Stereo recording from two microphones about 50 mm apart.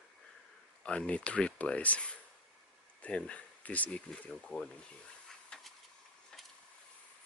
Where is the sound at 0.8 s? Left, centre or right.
Left.